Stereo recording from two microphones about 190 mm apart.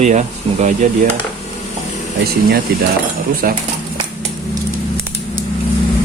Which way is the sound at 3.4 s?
50° right (ahead or behind).